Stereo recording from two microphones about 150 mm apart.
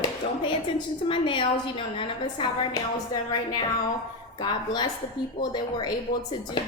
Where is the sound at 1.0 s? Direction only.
35° left (ahead or behind).